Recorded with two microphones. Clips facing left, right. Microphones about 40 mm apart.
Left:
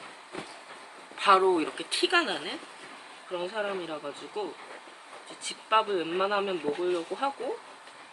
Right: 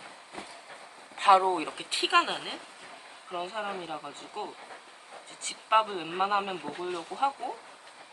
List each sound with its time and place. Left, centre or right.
0.3 s train: left
1.1 s a sound: centre
1.5 s speech: centre